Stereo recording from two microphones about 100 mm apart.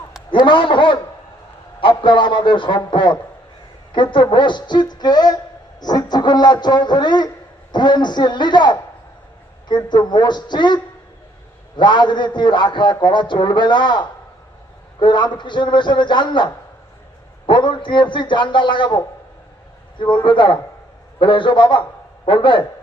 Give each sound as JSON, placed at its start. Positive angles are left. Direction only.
{"t": 0.3, "sound": "a man's voice", "side_deg": 55}
{"t": 11.8, "sound": "a man's voice", "side_deg": 50}